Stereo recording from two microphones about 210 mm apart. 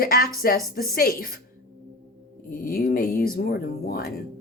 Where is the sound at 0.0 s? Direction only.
45° left (ahead or behind).